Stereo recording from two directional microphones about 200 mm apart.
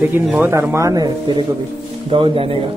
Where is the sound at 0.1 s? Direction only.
10° right (ahead or behind); by 2.6 s 25° right (ahead or behind).